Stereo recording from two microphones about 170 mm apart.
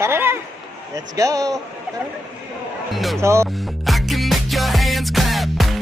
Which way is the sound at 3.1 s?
15° right (ahead or behind).